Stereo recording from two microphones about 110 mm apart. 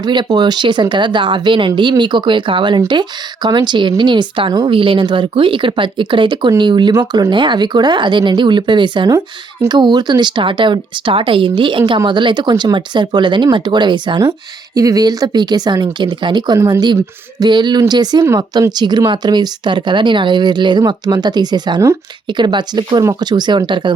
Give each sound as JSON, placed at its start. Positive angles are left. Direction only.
{"t": 0.0, "sound": "speech", "side_deg": -40}
{"t": 9.0, "sound": "speech", "side_deg": -25}
{"t": 9.6, "sound": "speech", "side_deg": -40}
{"t": 14.8, "sound": "speech", "side_deg": -35}